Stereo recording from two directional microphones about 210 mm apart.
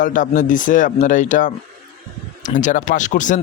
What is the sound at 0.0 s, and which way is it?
Speech, 40° left (ahead or behind).